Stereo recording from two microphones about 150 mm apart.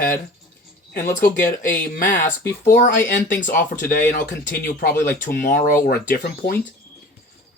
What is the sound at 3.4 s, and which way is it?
Speech, 65° left (ahead or behind).